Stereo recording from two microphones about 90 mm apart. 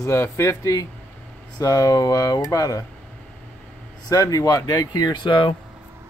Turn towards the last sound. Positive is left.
turn(degrees=65)  # may be behind; listen again after turning